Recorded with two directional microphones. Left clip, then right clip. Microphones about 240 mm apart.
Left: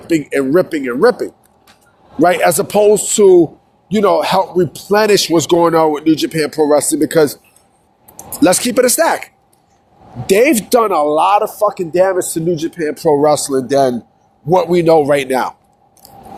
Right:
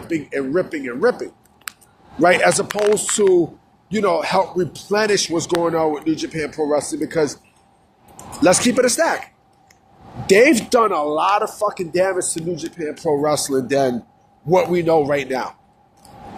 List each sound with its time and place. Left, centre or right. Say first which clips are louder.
0.1 s speech: left 8 dB; left
2.1 s speech: left 3 dB; left
8.4 s speech: left 3 dB; left; by 12.2 s centre
12.2 s speech: left 8 dB; left
13.2 s speech: left 6 dB; centre; by 15.5 s left